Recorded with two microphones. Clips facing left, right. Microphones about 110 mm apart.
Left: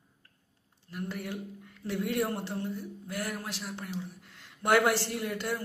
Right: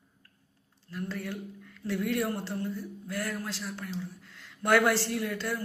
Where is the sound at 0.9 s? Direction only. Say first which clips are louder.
Right 1 dB; 20° left (ahead or behind).